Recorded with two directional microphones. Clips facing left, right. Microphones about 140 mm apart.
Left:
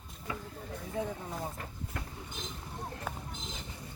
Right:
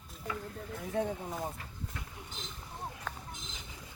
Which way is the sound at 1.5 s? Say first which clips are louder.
Left 3 dB; 50° left (ahead or behind).